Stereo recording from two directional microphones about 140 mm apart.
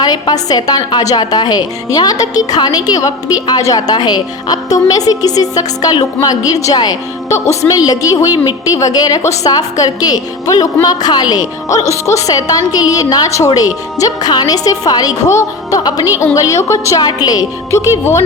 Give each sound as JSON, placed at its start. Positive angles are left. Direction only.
{"t": 0.0, "sound": "a woman's voice", "side_deg": 30}